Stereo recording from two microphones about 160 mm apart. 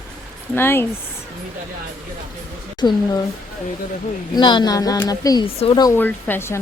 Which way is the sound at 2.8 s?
25° left (ahead or behind).